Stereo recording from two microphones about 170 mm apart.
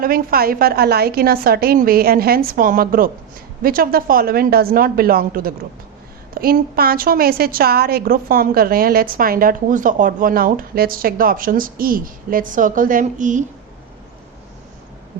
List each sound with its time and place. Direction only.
0.0 s a woman's voice: 60° right (ahead or behind)